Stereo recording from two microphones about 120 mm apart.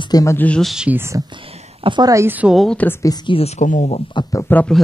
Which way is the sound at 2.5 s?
Centre (ahead or behind).